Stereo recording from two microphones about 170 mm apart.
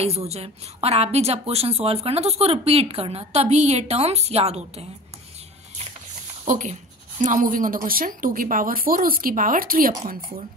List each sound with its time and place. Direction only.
0.0 s a woman's voice: 40° right (ahead or behind)
6.4 s speech: 45° right (ahead or behind)